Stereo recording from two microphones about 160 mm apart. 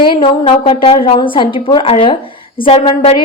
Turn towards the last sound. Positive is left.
turn(degrees=35)  # may be behind; listen again after turning